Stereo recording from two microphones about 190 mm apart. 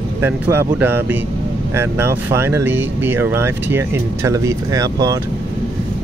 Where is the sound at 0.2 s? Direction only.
10° right (ahead or behind).